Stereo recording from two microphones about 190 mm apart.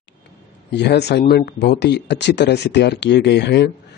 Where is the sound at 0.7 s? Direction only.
60° left (ahead or behind).